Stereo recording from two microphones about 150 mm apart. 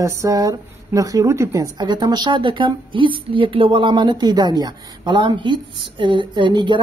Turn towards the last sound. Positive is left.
turn(degrees=-30)  # may be behind; listen again after turning